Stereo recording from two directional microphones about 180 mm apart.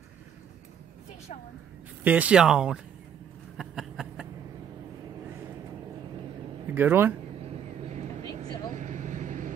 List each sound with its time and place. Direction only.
2.0 s speech: 10° right (ahead or behind)
3.5 s a sound: centre (ahead or behind)
6.7 s speech: 10° right (ahead or behind)
7.9 s vehicle: 40° right (ahead or behind)